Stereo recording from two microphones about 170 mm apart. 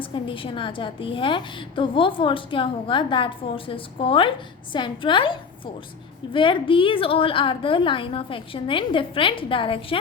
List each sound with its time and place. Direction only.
0.0 s a woman's voice: 30° left (ahead or behind)